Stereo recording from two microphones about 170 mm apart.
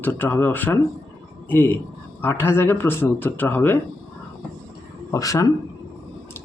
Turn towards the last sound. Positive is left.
turn(degrees=20)  # may be behind; listen again after turning